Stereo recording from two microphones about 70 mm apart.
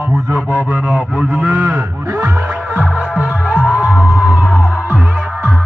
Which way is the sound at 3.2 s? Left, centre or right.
Centre.